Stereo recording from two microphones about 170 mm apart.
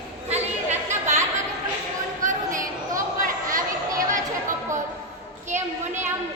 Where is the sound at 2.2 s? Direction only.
50° right (ahead or behind).